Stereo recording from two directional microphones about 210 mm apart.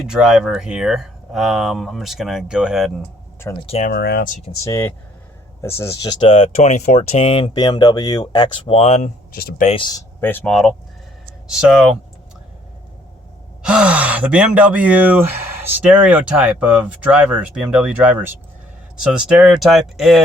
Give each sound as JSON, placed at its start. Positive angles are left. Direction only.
{"t": 0.0, "sound": "speech", "side_deg": -5}
{"t": 3.7, "sound": "speech", "side_deg": 35}
{"t": 3.9, "sound": "speech", "side_deg": 50}
{"t": 4.6, "sound": "speech", "side_deg": 15}
{"t": 9.3, "sound": "speech", "side_deg": 40}
{"t": 10.2, "sound": "speech", "side_deg": 10}
{"t": 13.6, "sound": "speech", "side_deg": -5}